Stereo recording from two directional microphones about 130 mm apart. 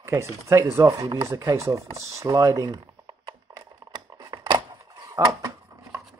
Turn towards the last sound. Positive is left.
turn(degrees=-25)  # may be behind; listen again after turning